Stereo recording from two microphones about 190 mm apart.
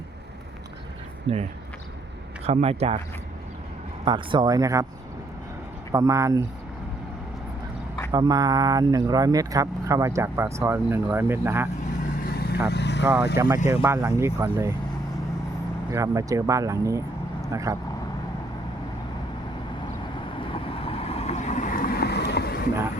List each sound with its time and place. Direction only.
1.3 s speech: 30° right (ahead or behind)
4.0 s speech: 25° right (ahead or behind)
5.9 s speech: 15° right (ahead or behind)
8.1 s speech: 20° right (ahead or behind)
12.3 s vehicle: 55° left (ahead or behind)
12.6 s speech: 60° left (ahead or behind)
13.3 s speech: 15° right (ahead or behind)
15.9 s speech: 15° right (ahead or behind)
20.4 s vehicle: 30° left (ahead or behind); by 22.6 s 55° left (ahead or behind)